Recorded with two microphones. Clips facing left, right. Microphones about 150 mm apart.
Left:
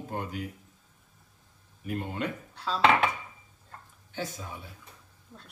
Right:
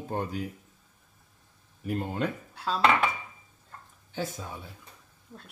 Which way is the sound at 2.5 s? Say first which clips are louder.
Right 2 dB; 5° right (ahead or behind).